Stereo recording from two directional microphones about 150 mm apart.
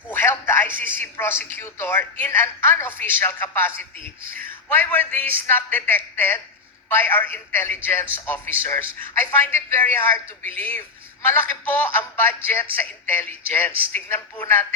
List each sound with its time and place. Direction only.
0.1 s a man's voice: 15° left (ahead or behind)